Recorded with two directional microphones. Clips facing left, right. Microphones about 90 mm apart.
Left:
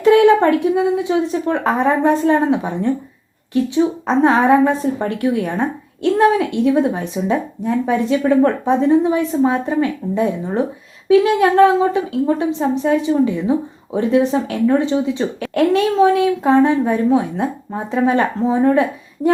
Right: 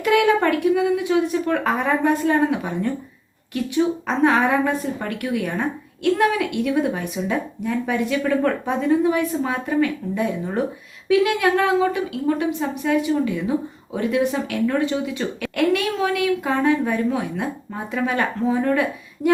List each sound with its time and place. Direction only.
0.0 s a woman's voice: 30° left (ahead or behind)